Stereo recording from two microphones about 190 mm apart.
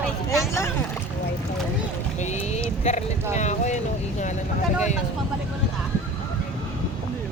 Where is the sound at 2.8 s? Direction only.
40° left (ahead or behind).